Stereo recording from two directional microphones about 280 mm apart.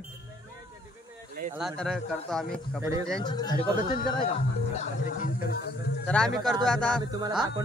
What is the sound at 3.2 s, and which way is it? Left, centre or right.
Speech, centre.